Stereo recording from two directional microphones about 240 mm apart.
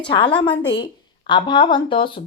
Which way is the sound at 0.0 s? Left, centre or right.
Left.